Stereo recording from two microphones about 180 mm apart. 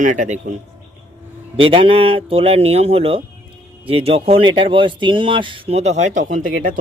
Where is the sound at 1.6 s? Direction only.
30° right (ahead or behind); by 6.7 s 45° right (ahead or behind).